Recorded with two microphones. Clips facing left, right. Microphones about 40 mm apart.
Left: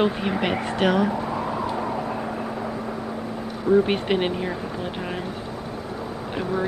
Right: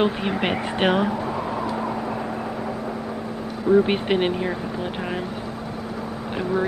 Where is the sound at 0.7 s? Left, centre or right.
Right.